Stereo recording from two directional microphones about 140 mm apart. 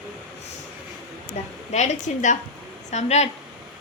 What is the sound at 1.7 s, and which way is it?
A woman's voice, 55° left (ahead or behind).